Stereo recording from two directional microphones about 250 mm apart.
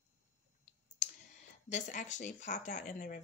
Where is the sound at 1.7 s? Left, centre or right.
Left.